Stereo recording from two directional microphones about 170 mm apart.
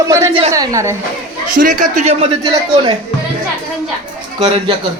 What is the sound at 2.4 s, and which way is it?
Speech, 20° right (ahead or behind).